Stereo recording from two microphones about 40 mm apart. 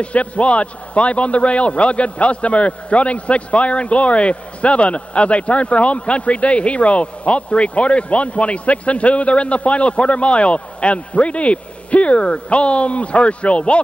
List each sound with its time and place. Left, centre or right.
0.0 s a man's voice: left